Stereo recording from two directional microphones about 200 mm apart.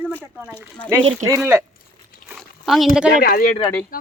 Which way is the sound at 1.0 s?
30° right (ahead or behind).